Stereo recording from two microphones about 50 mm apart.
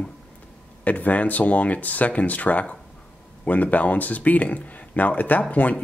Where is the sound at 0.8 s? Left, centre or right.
Left.